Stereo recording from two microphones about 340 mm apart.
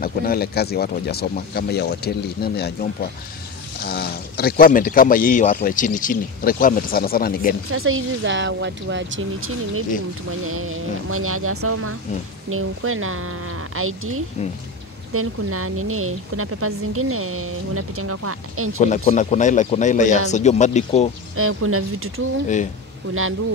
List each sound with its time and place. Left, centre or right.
0.0 s speech: left
7.7 s a woman's voice: right
18.8 s speech: left
21.4 s a woman's voice: right